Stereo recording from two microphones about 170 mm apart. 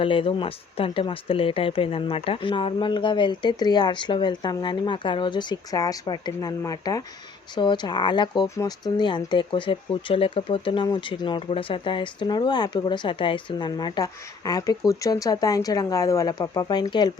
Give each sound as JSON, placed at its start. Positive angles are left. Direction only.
{"t": 0.0, "sound": "speech", "side_deg": 30}